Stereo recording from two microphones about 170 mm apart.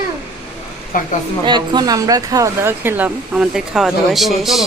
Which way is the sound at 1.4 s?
25° right (ahead or behind).